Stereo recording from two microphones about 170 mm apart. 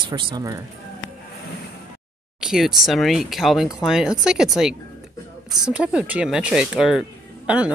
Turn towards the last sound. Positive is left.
turn(degrees=-5)  # may be behind; listen again after turning